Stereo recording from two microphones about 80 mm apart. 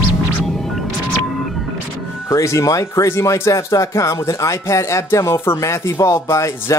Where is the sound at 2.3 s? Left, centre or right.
Left.